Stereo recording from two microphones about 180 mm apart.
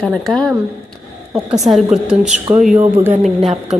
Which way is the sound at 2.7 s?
10° right (ahead or behind).